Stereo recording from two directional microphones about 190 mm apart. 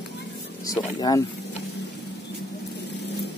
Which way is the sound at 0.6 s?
20° left (ahead or behind).